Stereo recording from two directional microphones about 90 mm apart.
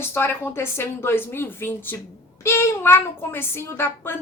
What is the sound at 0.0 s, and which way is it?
A child's voice, 25° left (ahead or behind).